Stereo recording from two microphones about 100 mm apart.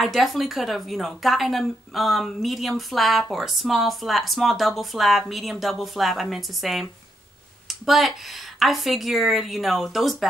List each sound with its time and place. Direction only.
0.0 s speech: centre (ahead or behind)
7.6 s a sound: centre (ahead or behind)
8.5 s speech: centre (ahead or behind)